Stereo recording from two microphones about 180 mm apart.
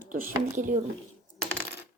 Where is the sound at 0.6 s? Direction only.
45° right (ahead or behind).